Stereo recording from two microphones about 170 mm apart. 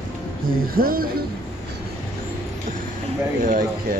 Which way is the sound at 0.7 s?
60° right (ahead or behind).